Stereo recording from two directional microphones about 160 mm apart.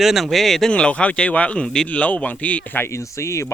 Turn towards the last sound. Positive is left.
turn(degrees=15)  # may be behind; listen again after turning